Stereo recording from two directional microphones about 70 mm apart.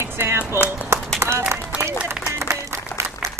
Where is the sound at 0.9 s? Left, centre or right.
Right.